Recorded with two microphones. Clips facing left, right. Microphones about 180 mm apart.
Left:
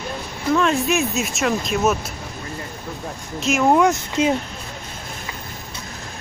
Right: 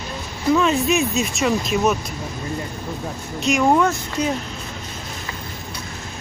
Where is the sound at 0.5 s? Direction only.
Centre (ahead or behind).